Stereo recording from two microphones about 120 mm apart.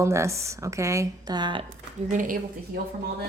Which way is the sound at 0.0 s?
25° right (ahead or behind).